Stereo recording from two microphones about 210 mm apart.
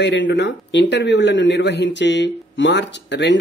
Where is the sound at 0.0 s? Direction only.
60° left (ahead or behind).